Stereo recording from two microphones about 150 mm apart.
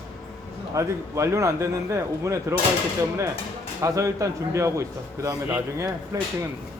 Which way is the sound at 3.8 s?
20° right (ahead or behind).